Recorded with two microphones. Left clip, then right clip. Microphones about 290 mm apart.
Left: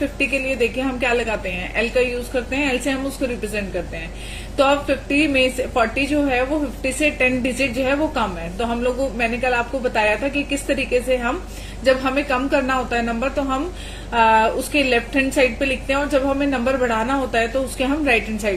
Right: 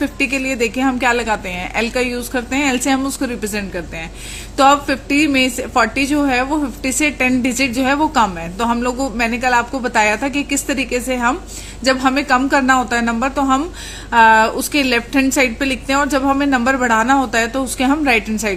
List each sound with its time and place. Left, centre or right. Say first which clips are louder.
0.2 s a woman's voice: right 2 dB; right